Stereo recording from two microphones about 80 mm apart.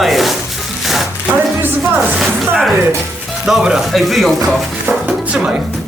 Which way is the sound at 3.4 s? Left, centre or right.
Centre.